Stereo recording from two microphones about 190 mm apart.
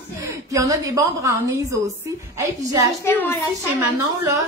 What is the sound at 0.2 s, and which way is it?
A woman's voice, 15° right (ahead or behind).